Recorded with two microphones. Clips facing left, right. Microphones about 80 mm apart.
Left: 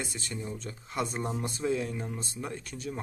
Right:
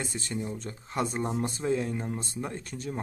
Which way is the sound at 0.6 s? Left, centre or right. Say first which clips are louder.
Right 2 dB; right.